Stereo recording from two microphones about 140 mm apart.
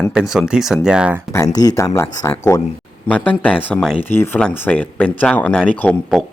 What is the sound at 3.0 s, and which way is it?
Speech, 10° left (ahead or behind).